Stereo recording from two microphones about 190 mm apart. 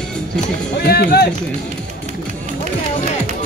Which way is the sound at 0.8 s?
55° left (ahead or behind).